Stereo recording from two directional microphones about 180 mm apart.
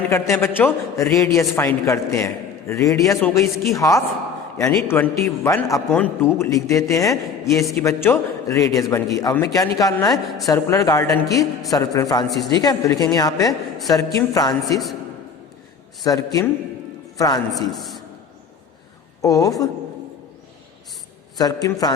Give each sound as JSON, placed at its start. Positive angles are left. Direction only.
{"t": 0.1, "sound": "a man's voice", "side_deg": 15}
{"t": 13.5, "sound": "a man's voice", "side_deg": 0}
{"t": 13.9, "sound": "a woman's voice", "side_deg": 20}
{"t": 16.0, "sound": "a woman's voice", "side_deg": 20}
{"t": 17.7, "sound": "a sound", "side_deg": 0}
{"t": 19.2, "sound": "a woman's voice", "side_deg": 20}
{"t": 21.3, "sound": "a woman's voice", "side_deg": 20}